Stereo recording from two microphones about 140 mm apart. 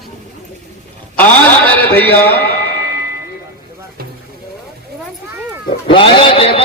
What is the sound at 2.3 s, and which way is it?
Music, 90° left.